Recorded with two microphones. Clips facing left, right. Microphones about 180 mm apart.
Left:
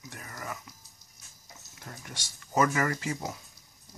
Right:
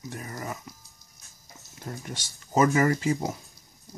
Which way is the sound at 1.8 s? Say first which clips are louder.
Right 8 dB; 25° right (ahead or behind).